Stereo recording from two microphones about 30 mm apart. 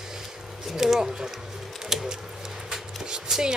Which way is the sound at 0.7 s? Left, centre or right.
Centre.